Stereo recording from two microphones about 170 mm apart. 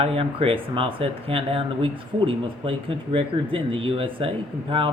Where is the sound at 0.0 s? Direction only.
35° right (ahead or behind).